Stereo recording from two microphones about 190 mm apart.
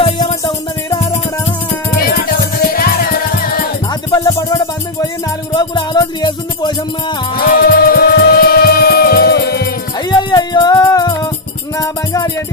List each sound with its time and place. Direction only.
0.0 s music: 30° left (ahead or behind)
2.0 s music: 50° left (ahead or behind)
4.1 s music: 20° left (ahead or behind)
7.3 s music: 50° left (ahead or behind)
10.0 s music: 20° left (ahead or behind)